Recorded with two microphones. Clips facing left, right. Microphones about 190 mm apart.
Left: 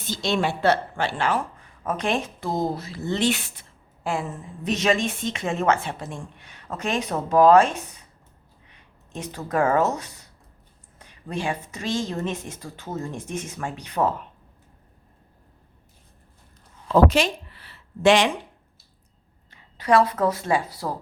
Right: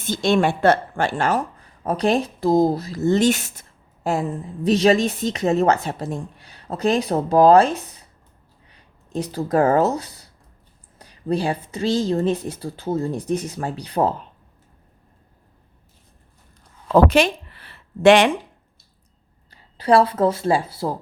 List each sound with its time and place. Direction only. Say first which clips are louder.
0.0 s a woman's voice: right 6 dB; 50° right (ahead or behind); by 14.1 s 35° right (ahead or behind)
16.9 s a sound: right 3 dB; 60° right (ahead or behind)
19.5 s speech: right 3 dB; 35° right (ahead or behind)